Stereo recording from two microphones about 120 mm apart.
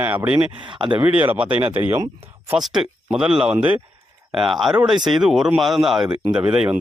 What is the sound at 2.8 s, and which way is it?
Speech, 5° right (ahead or behind).